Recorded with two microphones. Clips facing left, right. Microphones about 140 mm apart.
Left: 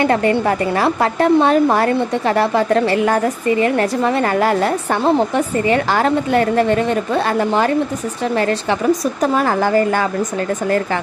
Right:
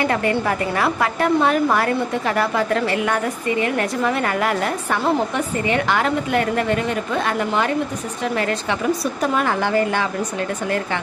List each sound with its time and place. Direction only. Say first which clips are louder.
0.0 s a woman's voice: left 5 dB; 30° left (ahead or behind)